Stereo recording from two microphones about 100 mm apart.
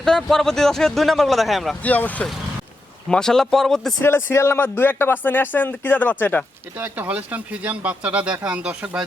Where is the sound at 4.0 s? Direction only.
25° left (ahead or behind).